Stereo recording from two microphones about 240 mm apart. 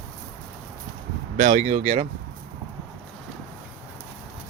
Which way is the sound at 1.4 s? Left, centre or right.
Right.